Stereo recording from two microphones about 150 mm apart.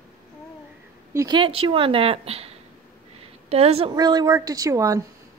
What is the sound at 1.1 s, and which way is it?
A woman's voice, 30° right (ahead or behind).